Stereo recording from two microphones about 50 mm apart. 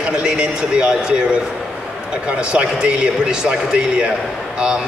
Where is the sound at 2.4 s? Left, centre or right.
Centre.